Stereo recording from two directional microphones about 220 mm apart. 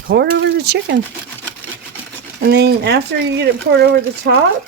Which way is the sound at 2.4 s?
45° right (ahead or behind).